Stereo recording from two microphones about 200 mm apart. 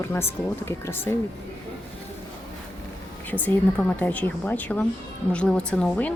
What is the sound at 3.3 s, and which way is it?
A woman's voice, 10° left (ahead or behind).